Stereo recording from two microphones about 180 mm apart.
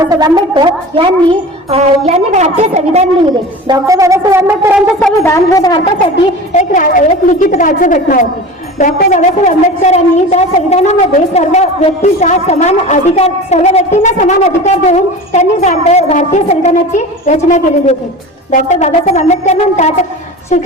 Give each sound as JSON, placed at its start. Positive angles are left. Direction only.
{"t": 0.0, "sound": "a woman's voice", "side_deg": -20}
{"t": 3.7, "sound": "speech", "side_deg": -20}
{"t": 4.9, "sound": "speech", "side_deg": 10}
{"t": 6.5, "sound": "a woman's voice", "side_deg": 45}